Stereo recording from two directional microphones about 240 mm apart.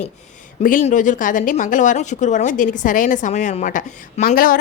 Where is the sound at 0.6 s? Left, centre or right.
Left.